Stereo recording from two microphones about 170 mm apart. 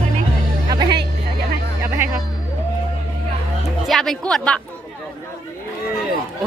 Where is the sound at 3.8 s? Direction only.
Centre (ahead or behind).